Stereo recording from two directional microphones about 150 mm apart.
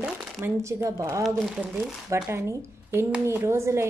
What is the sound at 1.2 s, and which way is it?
Speech, 5° right (ahead or behind).